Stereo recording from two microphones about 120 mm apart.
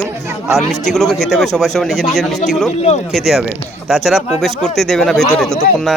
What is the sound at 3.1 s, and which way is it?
Speech, centre (ahead or behind).